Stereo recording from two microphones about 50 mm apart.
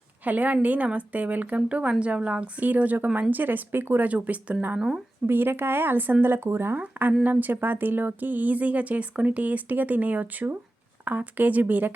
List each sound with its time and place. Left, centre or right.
0.3 s speech: right
5.2 s speech: right
7.3 s speech: right